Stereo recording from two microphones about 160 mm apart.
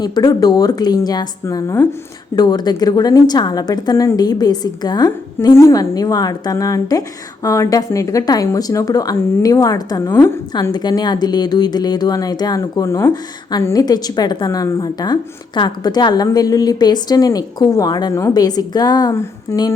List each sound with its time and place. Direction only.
0.0 s speech: 25° left (ahead or behind)